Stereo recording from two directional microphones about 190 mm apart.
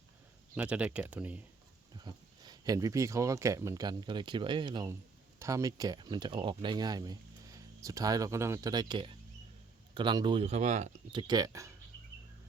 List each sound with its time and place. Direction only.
0.5 s speech: 5° right (ahead or behind)
2.0 s speech: 20° right (ahead or behind); by 10.9 s 40° right (ahead or behind)
11.1 s speech: 25° right (ahead or behind)